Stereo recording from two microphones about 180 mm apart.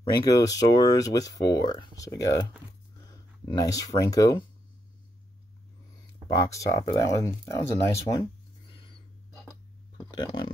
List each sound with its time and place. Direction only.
0.1 s speech: 20° left (ahead or behind)
3.5 s speech: 20° left (ahead or behind)
6.2 s speech: 20° left (ahead or behind)
8.6 s a sound: 25° left (ahead or behind)
9.9 s speech: 25° left (ahead or behind)